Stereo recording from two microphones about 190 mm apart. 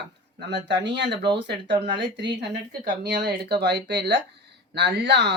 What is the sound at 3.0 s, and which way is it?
Speech, 60° right (ahead or behind).